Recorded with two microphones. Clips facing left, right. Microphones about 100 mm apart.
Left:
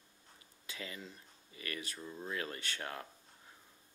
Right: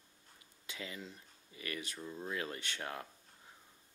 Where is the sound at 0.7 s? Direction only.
20° right (ahead or behind).